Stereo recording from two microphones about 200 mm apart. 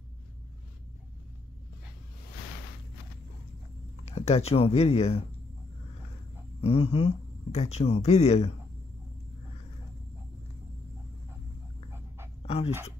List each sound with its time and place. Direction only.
4.0 s speech: 30° left (ahead or behind)
6.6 s speech: 30° left (ahead or behind)
12.4 s a sound: 30° left (ahead or behind)